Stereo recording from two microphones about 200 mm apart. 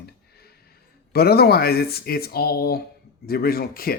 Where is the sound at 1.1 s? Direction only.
50° left (ahead or behind).